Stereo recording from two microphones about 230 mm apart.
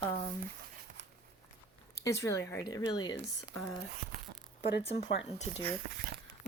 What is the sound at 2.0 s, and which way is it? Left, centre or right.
Speech, centre.